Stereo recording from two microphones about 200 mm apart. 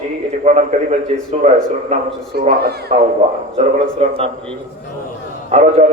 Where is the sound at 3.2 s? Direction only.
30° right (ahead or behind).